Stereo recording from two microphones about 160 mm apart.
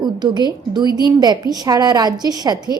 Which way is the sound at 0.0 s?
30° right (ahead or behind).